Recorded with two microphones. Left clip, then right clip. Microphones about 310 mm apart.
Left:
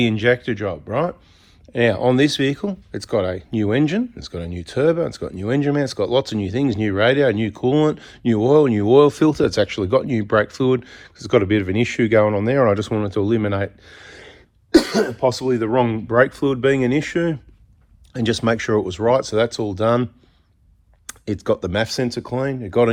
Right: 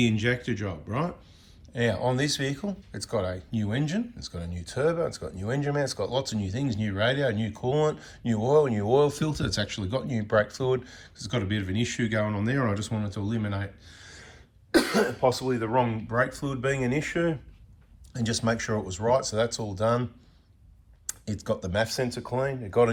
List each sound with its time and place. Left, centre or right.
0.0 s speech: centre
21.1 s speech: centre